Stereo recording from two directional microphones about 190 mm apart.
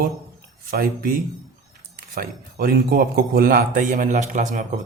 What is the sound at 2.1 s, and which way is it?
A man's voice, 50° right (ahead or behind).